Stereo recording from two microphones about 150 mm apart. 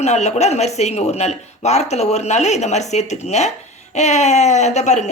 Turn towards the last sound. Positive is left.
turn(degrees=50)  # may be behind; listen again after turning